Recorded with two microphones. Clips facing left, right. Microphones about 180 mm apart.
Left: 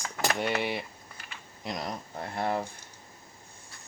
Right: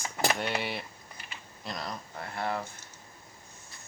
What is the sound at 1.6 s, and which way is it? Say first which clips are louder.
Speech: left 3 dB; 20° left (ahead or behind).